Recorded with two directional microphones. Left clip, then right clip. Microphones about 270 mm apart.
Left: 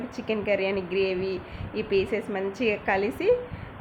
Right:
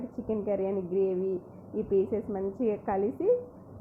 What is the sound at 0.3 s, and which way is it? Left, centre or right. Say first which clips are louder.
Speech: left 5 dB; centre.